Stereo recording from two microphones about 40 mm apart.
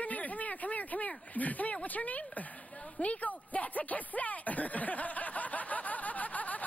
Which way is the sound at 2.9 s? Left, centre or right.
Left.